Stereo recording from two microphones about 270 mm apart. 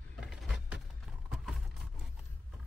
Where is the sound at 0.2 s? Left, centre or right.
Centre.